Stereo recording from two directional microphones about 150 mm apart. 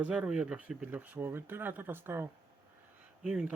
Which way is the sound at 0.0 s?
5° right (ahead or behind).